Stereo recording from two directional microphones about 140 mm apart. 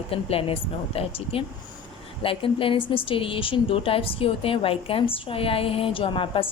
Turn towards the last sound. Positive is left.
turn(degrees=40)  # may be behind; listen again after turning